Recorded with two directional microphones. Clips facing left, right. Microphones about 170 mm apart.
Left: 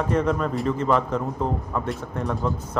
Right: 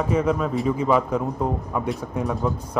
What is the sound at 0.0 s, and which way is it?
Speech, 5° right (ahead or behind).